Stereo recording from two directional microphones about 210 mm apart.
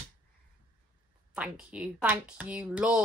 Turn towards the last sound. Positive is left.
turn(degrees=-5)  # may be behind; listen again after turning